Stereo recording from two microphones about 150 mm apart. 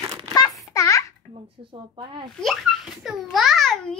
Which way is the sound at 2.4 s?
Centre (ahead or behind).